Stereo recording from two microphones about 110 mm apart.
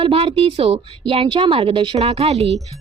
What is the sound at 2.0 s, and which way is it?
Speech, 70° right (ahead or behind).